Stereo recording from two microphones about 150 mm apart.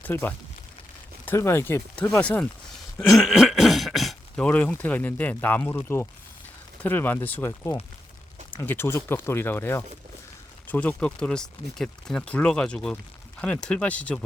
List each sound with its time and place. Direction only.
0.0 s speech: 15° left (ahead or behind)